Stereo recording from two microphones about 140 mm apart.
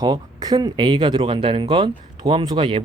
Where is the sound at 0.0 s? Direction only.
30° right (ahead or behind).